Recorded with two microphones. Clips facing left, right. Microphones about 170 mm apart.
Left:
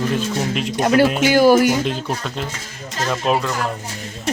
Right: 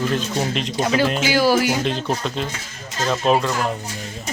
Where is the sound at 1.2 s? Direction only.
50° left (ahead or behind).